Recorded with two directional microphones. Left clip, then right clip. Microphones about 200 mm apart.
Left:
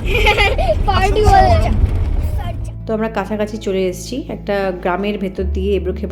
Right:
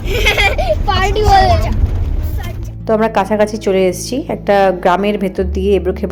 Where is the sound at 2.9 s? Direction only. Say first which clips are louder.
Right 7 dB; 5° right (ahead or behind).